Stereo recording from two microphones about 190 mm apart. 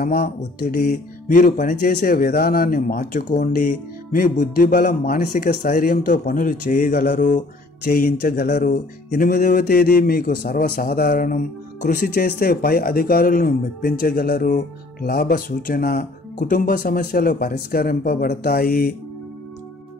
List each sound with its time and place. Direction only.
0.0 s speech: 55° left (ahead or behind)
0.8 s music: 40° left (ahead or behind)